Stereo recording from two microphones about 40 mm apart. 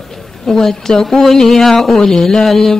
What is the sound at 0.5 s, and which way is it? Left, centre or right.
Speech, centre.